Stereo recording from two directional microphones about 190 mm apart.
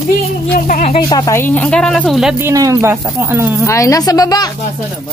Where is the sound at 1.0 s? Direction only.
20° left (ahead or behind); by 3.7 s 10° right (ahead or behind).